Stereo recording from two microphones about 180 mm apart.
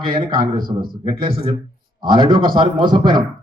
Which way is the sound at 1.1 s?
30° right (ahead or behind).